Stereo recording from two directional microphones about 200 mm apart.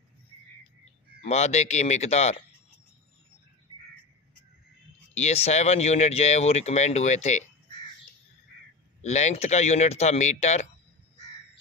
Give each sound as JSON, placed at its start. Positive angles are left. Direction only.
{"t": 1.2, "sound": "speech", "side_deg": 35}
{"t": 5.1, "sound": "speech", "side_deg": 30}
{"t": 9.0, "sound": "speech", "side_deg": 35}